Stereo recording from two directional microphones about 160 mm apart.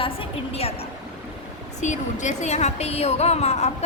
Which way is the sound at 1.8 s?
50° left (ahead or behind).